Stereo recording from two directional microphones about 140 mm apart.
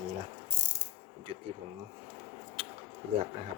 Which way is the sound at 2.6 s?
45° right (ahead or behind).